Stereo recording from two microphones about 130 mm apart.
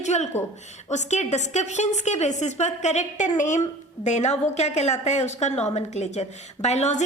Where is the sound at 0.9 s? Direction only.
65° left (ahead or behind).